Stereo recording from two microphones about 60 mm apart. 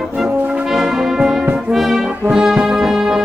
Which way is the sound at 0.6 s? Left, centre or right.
Centre.